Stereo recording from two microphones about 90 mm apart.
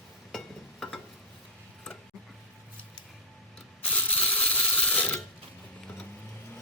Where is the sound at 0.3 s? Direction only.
Centre (ahead or behind).